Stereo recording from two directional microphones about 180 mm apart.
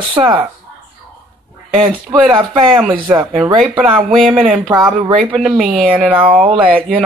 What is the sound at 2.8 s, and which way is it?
Speech, 5° right (ahead or behind).